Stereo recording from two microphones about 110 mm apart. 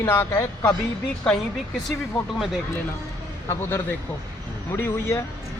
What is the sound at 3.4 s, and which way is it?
Speech, 25° left (ahead or behind).